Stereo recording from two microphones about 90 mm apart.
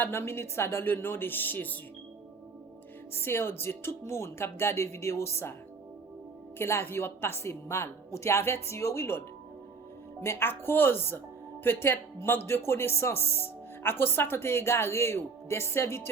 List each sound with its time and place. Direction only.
0.0 s speech: 25° left (ahead or behind)
3.1 s speech: 25° left (ahead or behind)
6.6 s speech: 30° left (ahead or behind)